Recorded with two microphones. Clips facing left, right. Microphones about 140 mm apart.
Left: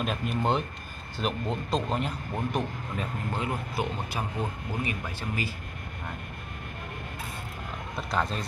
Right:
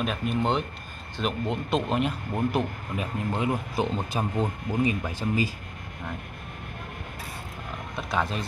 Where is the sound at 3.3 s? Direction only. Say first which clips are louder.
Right 5 dB; 20° right (ahead or behind).